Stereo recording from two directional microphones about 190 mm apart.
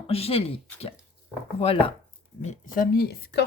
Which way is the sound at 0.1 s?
30° left (ahead or behind).